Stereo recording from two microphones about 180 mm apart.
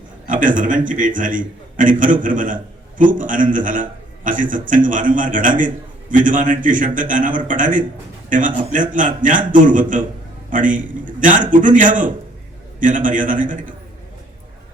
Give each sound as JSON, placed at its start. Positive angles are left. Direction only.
{"t": 0.3, "sound": "a man's voice", "side_deg": -45}